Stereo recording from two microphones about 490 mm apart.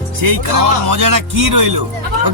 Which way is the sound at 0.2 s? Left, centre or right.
Right.